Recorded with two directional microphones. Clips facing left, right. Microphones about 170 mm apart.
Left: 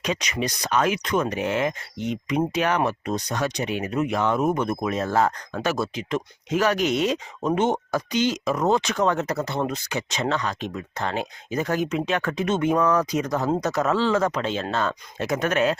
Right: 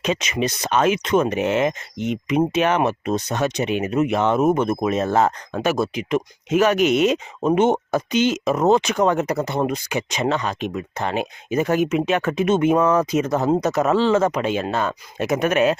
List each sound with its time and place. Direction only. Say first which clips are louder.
0.0 s speech: right 4 dB; 20° right (ahead or behind)